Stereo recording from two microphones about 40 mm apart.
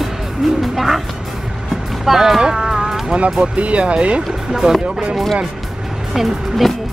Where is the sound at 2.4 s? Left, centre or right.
Centre.